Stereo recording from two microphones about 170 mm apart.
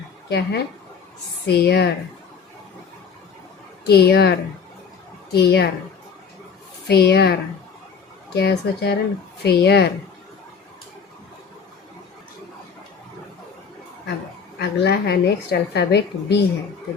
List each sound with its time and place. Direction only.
0.3 s a woman's voice: 75° left (ahead or behind)
3.8 s a woman's voice: 70° left (ahead or behind)
6.8 s a woman's voice: 70° left (ahead or behind)
14.6 s a woman's voice: 75° left (ahead or behind)